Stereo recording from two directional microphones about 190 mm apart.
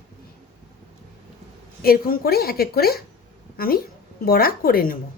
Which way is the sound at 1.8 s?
50° left (ahead or behind).